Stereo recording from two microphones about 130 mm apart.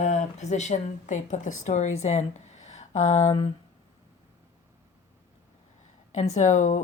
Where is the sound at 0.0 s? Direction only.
65° left (ahead or behind).